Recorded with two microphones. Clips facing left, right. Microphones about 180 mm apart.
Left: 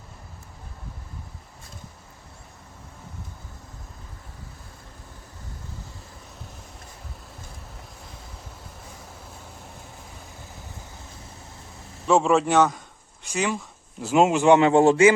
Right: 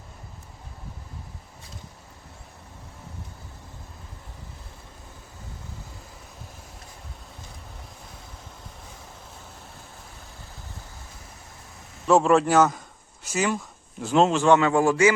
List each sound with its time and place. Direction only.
12.0 s a man's voice: 5° right (ahead or behind)
14.3 s a man's voice: 15° left (ahead or behind)